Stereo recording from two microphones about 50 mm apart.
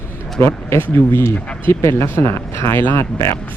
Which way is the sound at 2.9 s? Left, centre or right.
Left.